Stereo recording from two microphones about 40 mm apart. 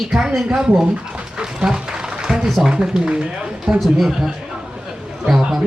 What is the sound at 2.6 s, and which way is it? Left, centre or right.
A man's voice, centre.